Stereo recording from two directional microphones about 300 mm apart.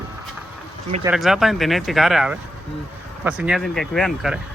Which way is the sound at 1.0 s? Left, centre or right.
Centre.